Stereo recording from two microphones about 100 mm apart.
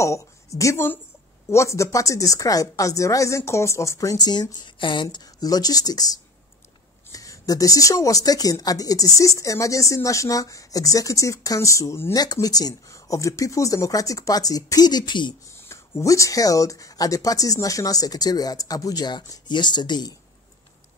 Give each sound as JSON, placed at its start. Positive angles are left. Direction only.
{"t": 0.0, "sound": "speech", "side_deg": 30}
{"t": 15.6, "sound": "speech", "side_deg": 25}